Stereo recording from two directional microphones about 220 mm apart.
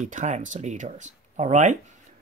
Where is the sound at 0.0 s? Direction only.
35° right (ahead or behind).